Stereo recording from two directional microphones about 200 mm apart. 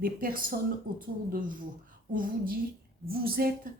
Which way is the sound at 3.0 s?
50° right (ahead or behind).